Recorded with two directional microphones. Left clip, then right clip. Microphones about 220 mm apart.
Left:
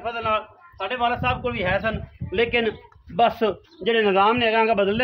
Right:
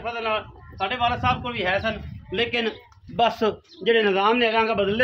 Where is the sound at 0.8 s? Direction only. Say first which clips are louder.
Even; 40° left (ahead or behind).